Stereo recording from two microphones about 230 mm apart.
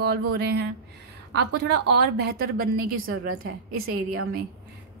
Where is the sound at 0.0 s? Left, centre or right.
Right.